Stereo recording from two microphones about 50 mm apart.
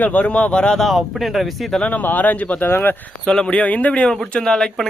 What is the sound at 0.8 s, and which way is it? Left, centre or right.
Speech, centre.